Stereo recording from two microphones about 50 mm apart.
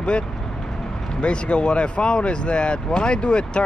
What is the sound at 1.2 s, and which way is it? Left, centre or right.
Speech, left.